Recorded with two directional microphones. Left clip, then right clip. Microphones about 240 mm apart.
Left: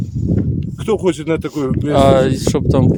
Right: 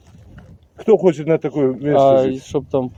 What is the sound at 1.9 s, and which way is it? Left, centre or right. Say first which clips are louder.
Speech: left 1 dB; left.